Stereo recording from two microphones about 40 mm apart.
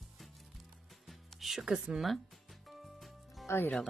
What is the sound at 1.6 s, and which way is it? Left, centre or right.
Speech, centre.